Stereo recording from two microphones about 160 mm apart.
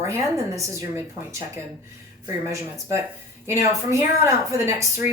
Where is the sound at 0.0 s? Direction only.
20° right (ahead or behind).